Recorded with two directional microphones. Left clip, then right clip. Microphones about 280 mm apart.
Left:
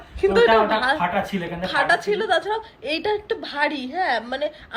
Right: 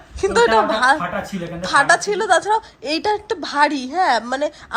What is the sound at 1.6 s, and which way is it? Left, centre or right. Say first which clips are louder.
A woman's voice: right 5 dB; centre.